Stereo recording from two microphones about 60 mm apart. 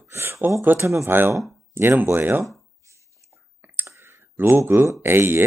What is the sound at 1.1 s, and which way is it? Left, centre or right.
Speech, right.